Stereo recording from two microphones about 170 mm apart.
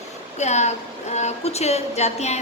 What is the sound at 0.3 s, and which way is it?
A woman's voice, 40° left (ahead or behind).